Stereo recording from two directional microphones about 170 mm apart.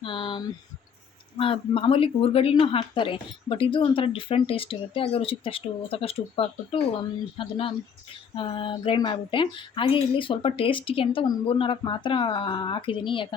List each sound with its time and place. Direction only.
0.0 s a woman's voice: 30° left (ahead or behind)